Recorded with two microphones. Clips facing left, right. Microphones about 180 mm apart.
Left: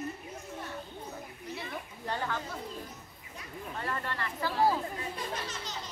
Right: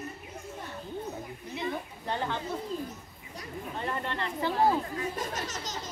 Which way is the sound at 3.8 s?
20° right (ahead or behind).